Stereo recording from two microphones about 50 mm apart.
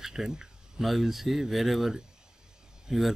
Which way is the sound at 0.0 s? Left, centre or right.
Centre.